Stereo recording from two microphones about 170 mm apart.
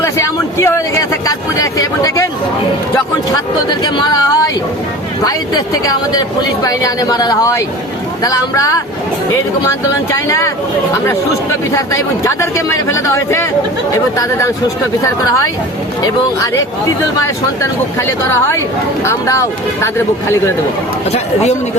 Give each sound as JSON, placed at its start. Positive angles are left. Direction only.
{"t": 0.0, "sound": "speech", "side_deg": 15}
{"t": 3.7, "sound": "speech", "side_deg": 25}
{"t": 10.1, "sound": "speech", "side_deg": 20}
{"t": 11.7, "sound": "speech", "side_deg": 15}
{"t": 19.0, "sound": "speech", "side_deg": 15}